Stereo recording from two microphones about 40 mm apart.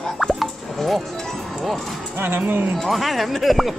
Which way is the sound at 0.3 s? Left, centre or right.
Centre.